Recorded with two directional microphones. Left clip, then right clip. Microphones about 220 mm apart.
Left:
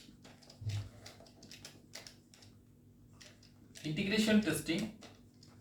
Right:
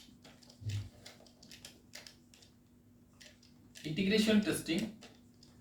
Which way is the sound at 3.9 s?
20° right (ahead or behind).